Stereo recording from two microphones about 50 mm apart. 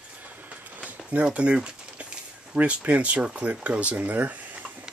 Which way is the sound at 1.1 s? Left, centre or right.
Right.